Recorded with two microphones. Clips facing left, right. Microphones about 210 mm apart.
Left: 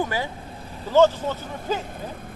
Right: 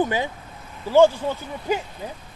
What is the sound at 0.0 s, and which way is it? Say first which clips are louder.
Speech: right 3 dB; 20° right (ahead or behind).